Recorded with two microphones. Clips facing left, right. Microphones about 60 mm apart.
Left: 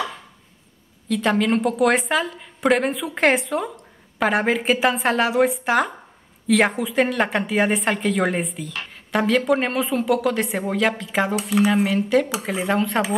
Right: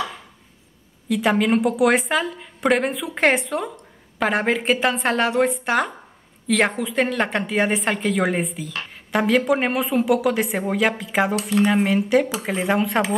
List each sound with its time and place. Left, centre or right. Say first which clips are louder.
1.0 s a woman's voice: right 1 dB; centre